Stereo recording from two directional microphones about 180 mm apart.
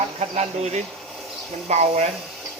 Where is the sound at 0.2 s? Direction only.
35° right (ahead or behind).